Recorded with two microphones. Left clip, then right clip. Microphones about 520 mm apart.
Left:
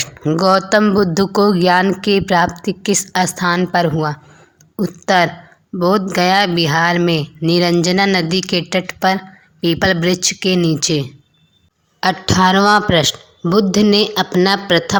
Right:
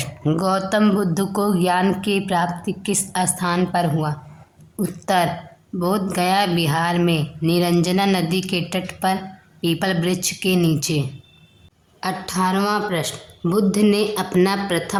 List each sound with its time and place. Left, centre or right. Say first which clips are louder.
0.0 s speech: left 7 dB; right